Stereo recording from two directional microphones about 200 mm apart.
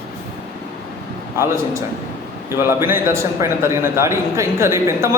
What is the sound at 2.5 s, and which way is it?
A man's voice, 10° right (ahead or behind).